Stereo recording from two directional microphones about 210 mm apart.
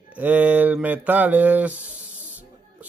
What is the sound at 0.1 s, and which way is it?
Speech, 10° right (ahead or behind).